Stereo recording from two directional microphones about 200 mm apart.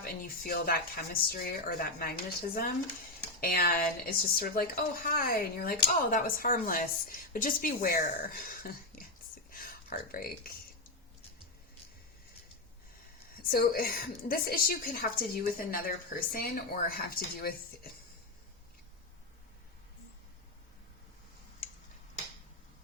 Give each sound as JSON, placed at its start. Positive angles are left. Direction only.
{"t": 0.0, "sound": "a woman's voice", "side_deg": 45}
{"t": 9.5, "sound": "a sound", "side_deg": 45}
{"t": 13.5, "sound": "a woman's voice", "side_deg": 50}